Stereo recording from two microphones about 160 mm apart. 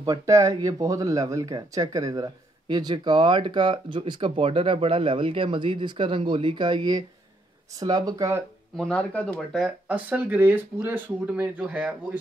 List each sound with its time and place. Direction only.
0.0 s speech: 20° right (ahead or behind)
8.7 s speech: 5° left (ahead or behind)
9.8 s speech: 10° right (ahead or behind)